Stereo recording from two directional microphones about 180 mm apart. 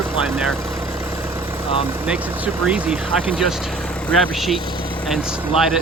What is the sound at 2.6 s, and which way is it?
Speech, 5° right (ahead or behind).